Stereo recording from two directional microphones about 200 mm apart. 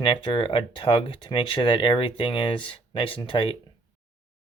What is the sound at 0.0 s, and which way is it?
Speech, 25° left (ahead or behind).